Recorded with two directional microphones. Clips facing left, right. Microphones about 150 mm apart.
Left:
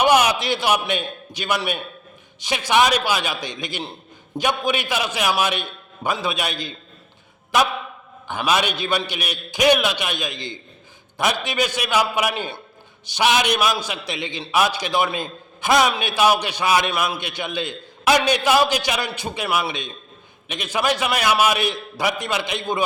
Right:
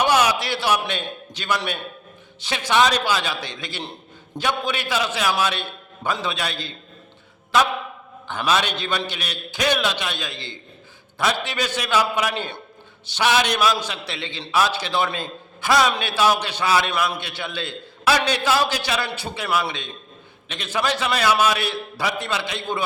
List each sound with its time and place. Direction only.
0.0 s a man's voice: 15° left (ahead or behind)
8.3 s a man's voice: 10° left (ahead or behind)